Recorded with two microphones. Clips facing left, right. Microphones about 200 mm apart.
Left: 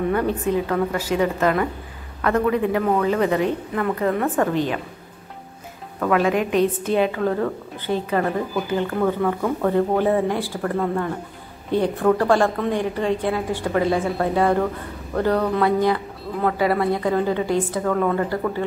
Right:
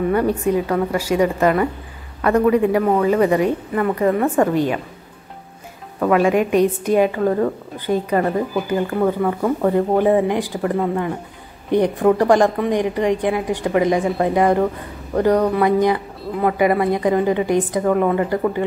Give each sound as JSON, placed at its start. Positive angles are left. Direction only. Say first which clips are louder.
{"t": 0.1, "sound": "a woman's voice", "louder": "right 3 dB", "side_deg": -10}
{"t": 5.9, "sound": "a woman's voice", "louder": "right 4 dB", "side_deg": -10}